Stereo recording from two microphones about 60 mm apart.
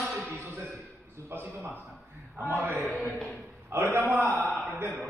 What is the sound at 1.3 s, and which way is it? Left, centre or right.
A man's voice, right.